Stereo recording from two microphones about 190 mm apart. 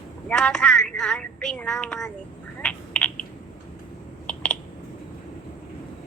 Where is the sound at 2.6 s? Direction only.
5° left (ahead or behind).